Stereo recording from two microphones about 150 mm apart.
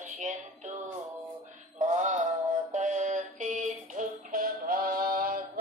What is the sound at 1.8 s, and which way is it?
Music, 55° right (ahead or behind).